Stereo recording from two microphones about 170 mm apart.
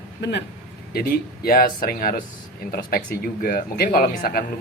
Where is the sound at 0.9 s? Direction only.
60° left (ahead or behind).